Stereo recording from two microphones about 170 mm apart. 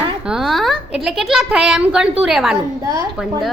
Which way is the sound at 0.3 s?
Centre (ahead or behind).